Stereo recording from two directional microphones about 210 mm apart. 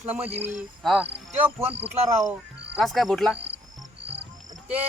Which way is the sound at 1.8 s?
30° right (ahead or behind).